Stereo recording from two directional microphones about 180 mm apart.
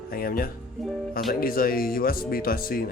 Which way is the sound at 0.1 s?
55° left (ahead or behind).